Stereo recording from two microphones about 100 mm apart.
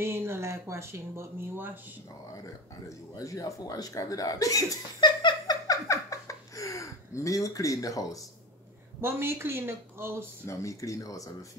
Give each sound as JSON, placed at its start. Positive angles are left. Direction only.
{"t": 0.0, "sound": "speech", "side_deg": -25}
{"t": 3.2, "sound": "speech", "side_deg": 35}
{"t": 5.0, "sound": "a sound", "side_deg": 45}
{"t": 5.9, "sound": "a sound", "side_deg": 30}
{"t": 9.0, "sound": "speech", "side_deg": -25}
{"t": 10.4, "sound": "speech", "side_deg": 30}